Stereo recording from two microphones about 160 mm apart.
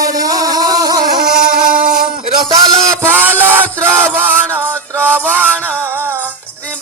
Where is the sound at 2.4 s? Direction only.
30° right (ahead or behind).